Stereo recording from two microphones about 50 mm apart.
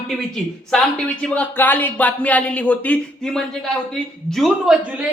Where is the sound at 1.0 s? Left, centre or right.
Left.